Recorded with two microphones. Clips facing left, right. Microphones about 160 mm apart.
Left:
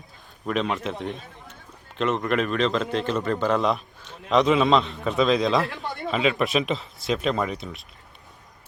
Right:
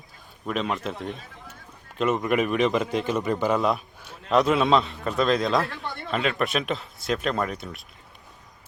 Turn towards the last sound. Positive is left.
turn(degrees=0)  # may be behind; listen again after turning